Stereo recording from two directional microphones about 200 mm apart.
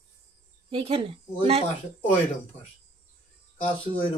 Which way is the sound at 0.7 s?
30° right (ahead or behind).